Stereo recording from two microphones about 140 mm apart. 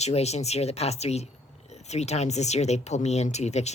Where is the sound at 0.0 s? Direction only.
50° left (ahead or behind).